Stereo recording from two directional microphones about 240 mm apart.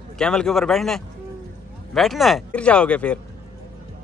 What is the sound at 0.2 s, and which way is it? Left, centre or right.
A man's voice, centre.